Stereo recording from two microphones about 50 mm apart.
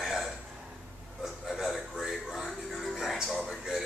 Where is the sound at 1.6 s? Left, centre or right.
Centre.